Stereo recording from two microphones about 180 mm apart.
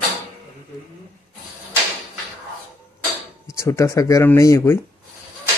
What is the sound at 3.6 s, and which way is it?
Speech, 15° left (ahead or behind).